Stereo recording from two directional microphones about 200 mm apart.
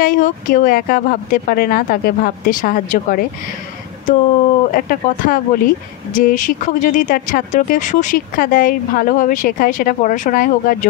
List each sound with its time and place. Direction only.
0.0 s speech: 40° left (ahead or behind)
4.6 s speech: 45° left (ahead or behind)